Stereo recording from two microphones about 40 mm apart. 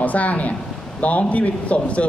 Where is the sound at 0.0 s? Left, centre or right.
Left.